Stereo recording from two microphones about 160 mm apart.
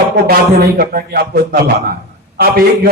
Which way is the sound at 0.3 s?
75° right (ahead or behind).